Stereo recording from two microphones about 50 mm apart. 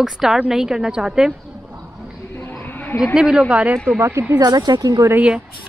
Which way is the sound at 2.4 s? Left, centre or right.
Left.